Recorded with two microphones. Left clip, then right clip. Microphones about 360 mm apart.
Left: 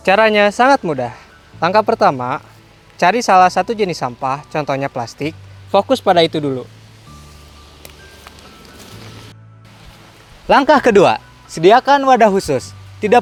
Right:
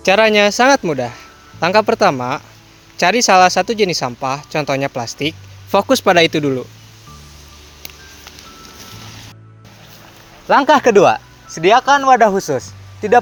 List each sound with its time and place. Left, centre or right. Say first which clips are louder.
0.0 s speech: even; centre
10.4 s speech: even; left